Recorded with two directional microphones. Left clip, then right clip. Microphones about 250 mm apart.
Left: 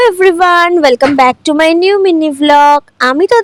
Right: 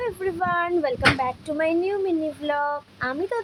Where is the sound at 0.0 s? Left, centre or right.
Left.